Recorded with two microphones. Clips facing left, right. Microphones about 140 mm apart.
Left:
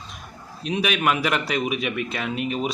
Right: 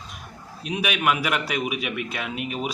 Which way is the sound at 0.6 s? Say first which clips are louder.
Left 2 dB; 10° right (ahead or behind).